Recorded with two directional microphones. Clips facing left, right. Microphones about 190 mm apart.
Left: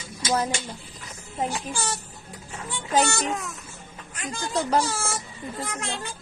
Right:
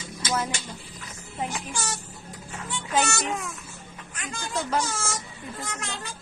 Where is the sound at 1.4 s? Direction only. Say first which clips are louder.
Left 3 dB; 35° left (ahead or behind).